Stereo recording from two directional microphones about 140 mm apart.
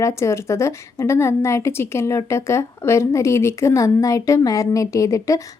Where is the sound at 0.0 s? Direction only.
20° left (ahead or behind).